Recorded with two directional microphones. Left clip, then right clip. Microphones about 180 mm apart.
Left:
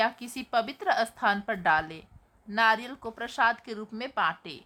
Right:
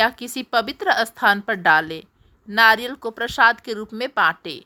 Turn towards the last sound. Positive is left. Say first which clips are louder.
# right 9 dB
turn(degrees=-35)  # may be behind; listen again after turning